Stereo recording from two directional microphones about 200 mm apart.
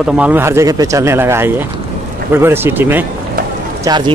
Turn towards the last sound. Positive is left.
turn(degrees=-20)  # may be behind; listen again after turning